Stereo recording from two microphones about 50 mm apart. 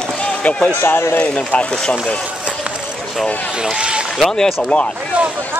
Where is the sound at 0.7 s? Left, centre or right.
Left.